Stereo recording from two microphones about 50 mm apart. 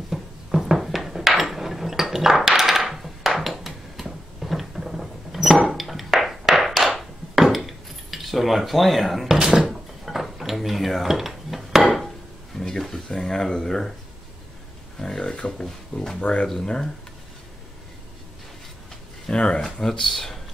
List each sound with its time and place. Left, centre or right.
0.1 s a sound: centre
9.4 s speech: centre
9.7 s drawer open or close: centre
12.5 s speech: centre
15.0 s speech: centre
16.2 s speech: left
16.4 s speech: centre
19.2 s speech: centre
19.6 s speech: centre